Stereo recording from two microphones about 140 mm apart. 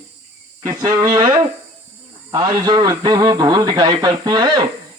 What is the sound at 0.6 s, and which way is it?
A man's voice, 30° right (ahead or behind).